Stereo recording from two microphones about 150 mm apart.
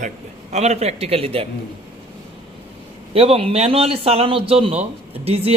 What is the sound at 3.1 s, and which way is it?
A man's voice, 40° right (ahead or behind).